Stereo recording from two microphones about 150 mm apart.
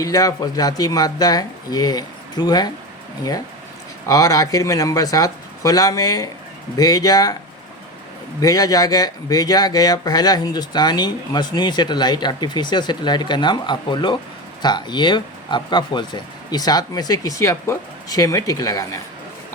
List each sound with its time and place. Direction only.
0.0 s speech: 25° left (ahead or behind)
4.0 s speech: 25° left (ahead or behind)
8.4 s speech: 25° left (ahead or behind)